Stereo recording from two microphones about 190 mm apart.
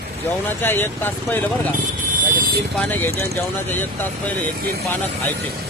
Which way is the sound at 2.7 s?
10° left (ahead or behind).